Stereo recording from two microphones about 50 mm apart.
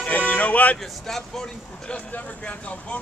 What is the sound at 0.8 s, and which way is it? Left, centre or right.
Speech, centre.